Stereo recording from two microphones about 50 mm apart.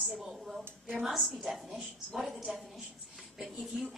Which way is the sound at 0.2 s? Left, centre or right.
Centre.